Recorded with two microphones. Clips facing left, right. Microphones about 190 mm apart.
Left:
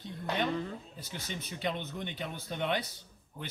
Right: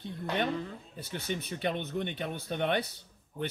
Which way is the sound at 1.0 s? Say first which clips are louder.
Right 11 dB; 60° right (ahead or behind).